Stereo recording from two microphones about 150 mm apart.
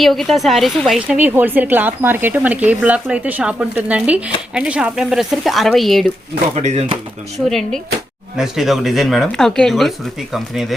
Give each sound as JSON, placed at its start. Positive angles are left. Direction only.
{"t": 0.0, "sound": "speech", "side_deg": 0}
{"t": 6.6, "sound": "speech", "side_deg": -50}
{"t": 7.3, "sound": "speech", "side_deg": 0}